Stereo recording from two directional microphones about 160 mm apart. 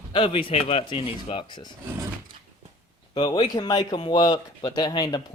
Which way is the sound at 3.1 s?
30° left (ahead or behind).